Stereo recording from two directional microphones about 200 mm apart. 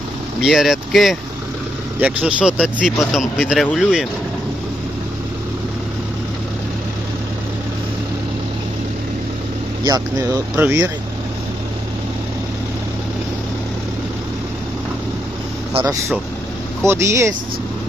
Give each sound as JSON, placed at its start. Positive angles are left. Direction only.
{"t": 0.4, "sound": "speech", "side_deg": 0}
{"t": 9.8, "sound": "speech", "side_deg": -20}
{"t": 15.7, "sound": "speech", "side_deg": -20}